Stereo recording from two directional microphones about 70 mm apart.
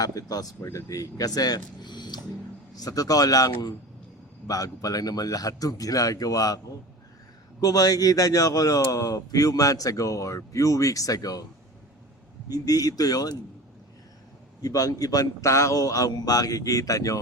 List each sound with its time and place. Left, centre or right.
0.0 s a man's voice: left
2.7 s a man's voice: left
7.6 s a man's voice: left
12.5 s a man's voice: left
14.6 s a man's voice: left